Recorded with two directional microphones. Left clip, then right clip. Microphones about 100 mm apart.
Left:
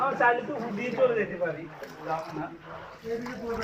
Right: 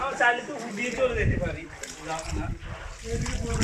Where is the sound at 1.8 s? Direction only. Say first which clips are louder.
Left 1 dB; 20° right (ahead or behind).